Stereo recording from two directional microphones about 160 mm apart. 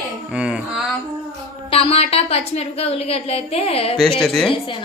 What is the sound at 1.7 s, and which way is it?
A woman's voice, 35° left (ahead or behind).